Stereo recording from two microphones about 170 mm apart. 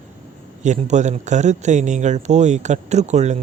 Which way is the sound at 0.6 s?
45° right (ahead or behind).